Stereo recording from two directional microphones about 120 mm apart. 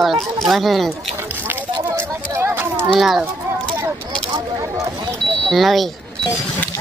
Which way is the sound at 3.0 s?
5° right (ahead or behind).